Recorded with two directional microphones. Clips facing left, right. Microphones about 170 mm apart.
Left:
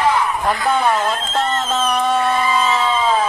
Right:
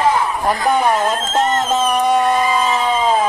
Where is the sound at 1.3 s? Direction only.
45° right (ahead or behind).